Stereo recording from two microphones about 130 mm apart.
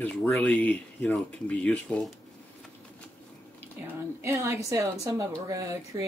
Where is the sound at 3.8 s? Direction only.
20° right (ahead or behind).